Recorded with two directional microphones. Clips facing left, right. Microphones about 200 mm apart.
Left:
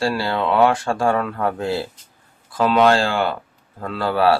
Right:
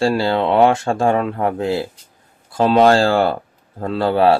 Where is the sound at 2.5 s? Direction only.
30° right (ahead or behind).